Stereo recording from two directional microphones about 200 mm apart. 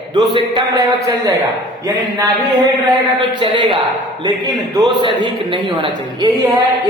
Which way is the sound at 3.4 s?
25° right (ahead or behind).